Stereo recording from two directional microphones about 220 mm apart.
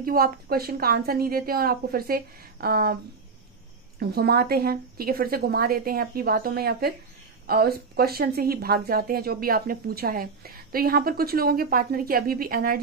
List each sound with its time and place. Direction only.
0.0 s speech: 40° right (ahead or behind)
4.0 s speech: 45° right (ahead or behind)